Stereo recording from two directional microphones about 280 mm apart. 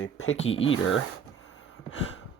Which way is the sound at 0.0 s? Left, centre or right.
Left.